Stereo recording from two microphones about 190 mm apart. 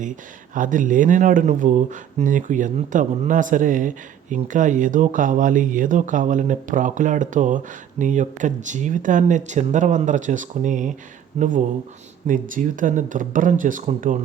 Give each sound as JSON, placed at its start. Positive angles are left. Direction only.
{"t": 0.0, "sound": "speech", "side_deg": -45}